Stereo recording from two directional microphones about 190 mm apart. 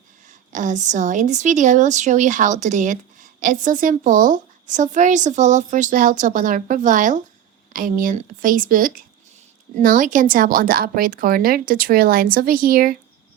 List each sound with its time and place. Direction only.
0.5 s a woman's voice: 40° right (ahead or behind)